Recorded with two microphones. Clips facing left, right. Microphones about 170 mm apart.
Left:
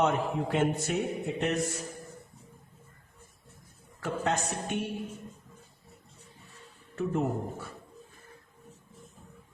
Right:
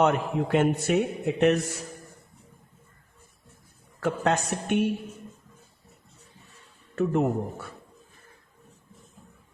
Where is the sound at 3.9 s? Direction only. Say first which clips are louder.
Right 5 dB; 70° right (ahead or behind).